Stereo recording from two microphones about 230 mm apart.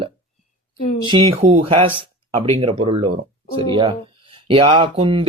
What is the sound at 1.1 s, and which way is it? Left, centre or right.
Speech, right.